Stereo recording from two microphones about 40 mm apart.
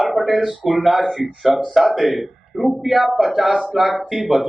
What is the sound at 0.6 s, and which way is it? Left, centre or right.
A man's voice, centre.